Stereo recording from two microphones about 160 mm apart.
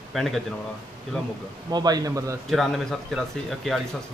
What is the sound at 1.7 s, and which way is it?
Speech, 25° right (ahead or behind).